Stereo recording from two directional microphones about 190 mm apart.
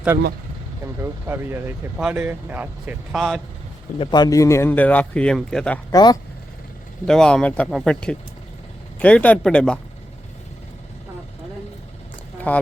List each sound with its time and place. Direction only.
1.0 s speech: 10° right (ahead or behind)
3.9 s speech: 25° left (ahead or behind); by 5.8 s 5° left (ahead or behind)
5.9 s speech: 20° left (ahead or behind)
7.1 s speech: 5° left (ahead or behind)
12.5 s speech: 10° left (ahead or behind)